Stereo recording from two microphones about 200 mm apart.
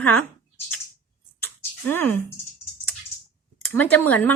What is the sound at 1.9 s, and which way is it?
Speech, 10° left (ahead or behind).